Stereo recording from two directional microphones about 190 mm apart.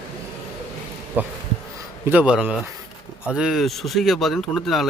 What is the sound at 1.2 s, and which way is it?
Speech, 10° right (ahead or behind).